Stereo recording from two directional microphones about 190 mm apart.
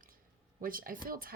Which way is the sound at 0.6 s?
50° right (ahead or behind).